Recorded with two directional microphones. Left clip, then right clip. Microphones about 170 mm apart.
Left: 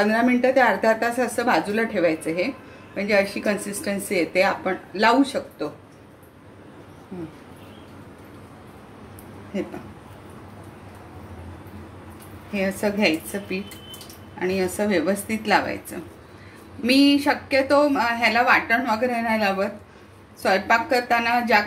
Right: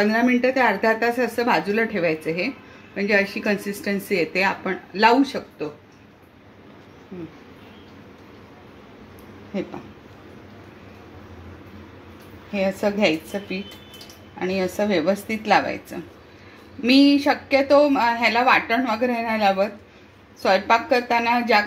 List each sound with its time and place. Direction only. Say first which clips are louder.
0.0 s a woman's voice: even; 45° right (ahead or behind)
7.1 s a sound: left 1 dB; 15° left (ahead or behind)
12.5 s a woman's voice: right 2 dB; 30° right (ahead or behind)